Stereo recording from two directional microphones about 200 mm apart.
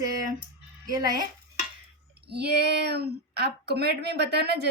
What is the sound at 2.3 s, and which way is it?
Speech, 55° right (ahead or behind).